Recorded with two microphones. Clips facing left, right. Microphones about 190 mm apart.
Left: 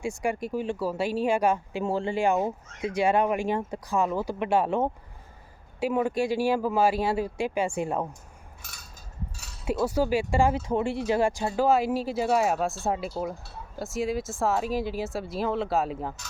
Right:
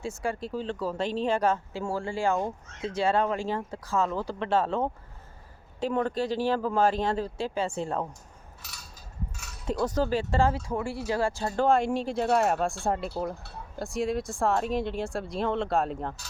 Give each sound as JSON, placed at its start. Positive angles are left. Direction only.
{"t": 0.0, "sound": "speech", "side_deg": 15}
{"t": 8.6, "sound": "mechanisms", "side_deg": 50}
{"t": 9.8, "sound": "speech", "side_deg": 10}